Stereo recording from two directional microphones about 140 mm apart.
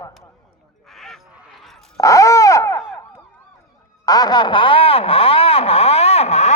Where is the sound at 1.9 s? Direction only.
25° left (ahead or behind).